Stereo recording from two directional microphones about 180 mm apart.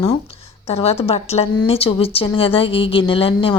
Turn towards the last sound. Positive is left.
turn(degrees=30)  # may be behind; listen again after turning